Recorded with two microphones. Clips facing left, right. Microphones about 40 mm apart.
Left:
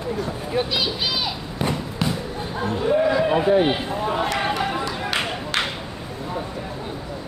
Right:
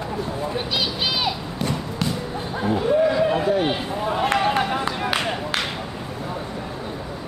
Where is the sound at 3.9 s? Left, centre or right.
Centre.